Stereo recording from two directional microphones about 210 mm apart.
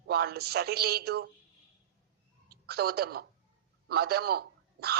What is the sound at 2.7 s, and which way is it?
A man's voice, 50° right (ahead or behind).